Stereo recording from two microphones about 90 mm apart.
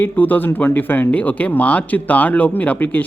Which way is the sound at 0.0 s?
20° left (ahead or behind).